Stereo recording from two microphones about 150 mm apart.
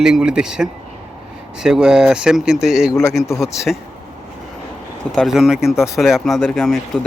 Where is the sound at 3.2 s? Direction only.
20° left (ahead or behind).